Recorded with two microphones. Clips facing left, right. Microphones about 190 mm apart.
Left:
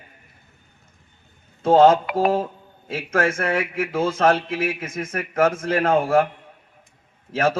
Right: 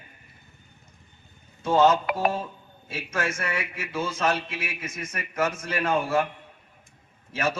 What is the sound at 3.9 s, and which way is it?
Speech, 90° left.